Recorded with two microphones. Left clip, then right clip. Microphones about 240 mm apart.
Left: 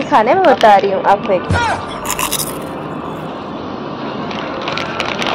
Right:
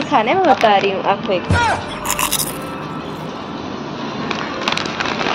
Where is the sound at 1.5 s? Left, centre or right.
Centre.